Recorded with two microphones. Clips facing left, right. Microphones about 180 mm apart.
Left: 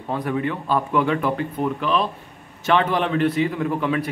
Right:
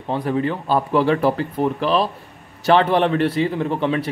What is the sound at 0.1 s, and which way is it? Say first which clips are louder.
A man's voice: right 3 dB; 30° right (ahead or behind).